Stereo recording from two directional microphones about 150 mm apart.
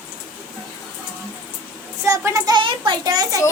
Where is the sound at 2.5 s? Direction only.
30° right (ahead or behind).